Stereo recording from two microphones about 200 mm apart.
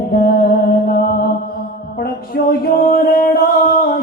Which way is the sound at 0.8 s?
45° left (ahead or behind).